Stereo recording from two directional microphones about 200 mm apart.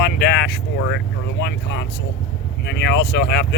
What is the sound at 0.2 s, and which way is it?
Speech, 55° left (ahead or behind).